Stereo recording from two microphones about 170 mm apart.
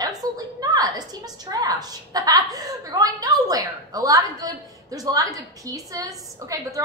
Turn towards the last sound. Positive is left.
turn(degrees=-20)  # may be behind; listen again after turning